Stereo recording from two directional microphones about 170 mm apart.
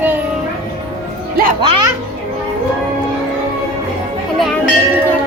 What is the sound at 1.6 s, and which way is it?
Speech, 30° right (ahead or behind).